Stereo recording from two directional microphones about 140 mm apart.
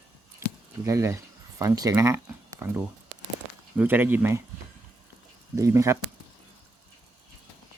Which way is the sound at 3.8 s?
15° right (ahead or behind).